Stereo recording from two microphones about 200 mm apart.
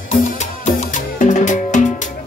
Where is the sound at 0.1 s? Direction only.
35° left (ahead or behind).